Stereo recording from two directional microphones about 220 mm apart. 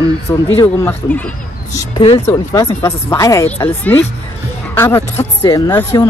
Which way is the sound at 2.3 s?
15° left (ahead or behind).